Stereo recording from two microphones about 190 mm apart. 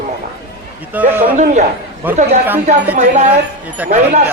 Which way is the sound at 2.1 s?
10° right (ahead or behind).